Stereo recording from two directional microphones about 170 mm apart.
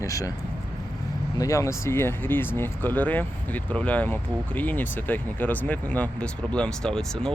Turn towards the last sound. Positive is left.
turn(degrees=5)  # may be behind; listen again after turning